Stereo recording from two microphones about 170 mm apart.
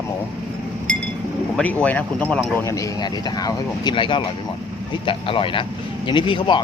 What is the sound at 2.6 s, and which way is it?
Speech, 20° left (ahead or behind).